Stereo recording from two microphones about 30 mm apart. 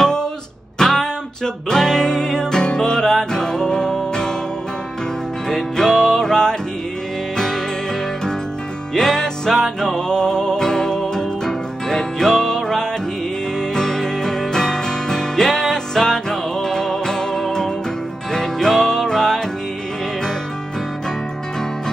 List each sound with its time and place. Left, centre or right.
0.0 s music: left
5.5 s music: centre
9.1 s music: centre
15.4 s music: centre